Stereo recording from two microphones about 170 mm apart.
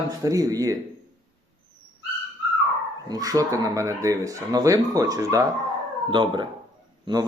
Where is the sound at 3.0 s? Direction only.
20° right (ahead or behind).